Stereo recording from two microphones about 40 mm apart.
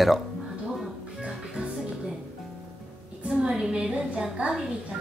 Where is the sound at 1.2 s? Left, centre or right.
Right.